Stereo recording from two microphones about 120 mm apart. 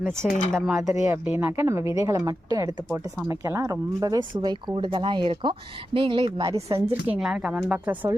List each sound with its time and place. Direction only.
0.3 s speech: 90° left
0.5 s speech: 5° right (ahead or behind)
0.8 s a woman's voice: 25° right (ahead or behind); by 6.5 s 45° right (ahead or behind)
6.5 s a woman's voice: 25° right (ahead or behind)
7.1 s a woman's voice: 5° right (ahead or behind)